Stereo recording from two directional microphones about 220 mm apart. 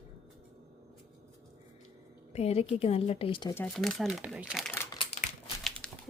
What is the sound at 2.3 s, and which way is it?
A woman's voice, 30° left (ahead or behind).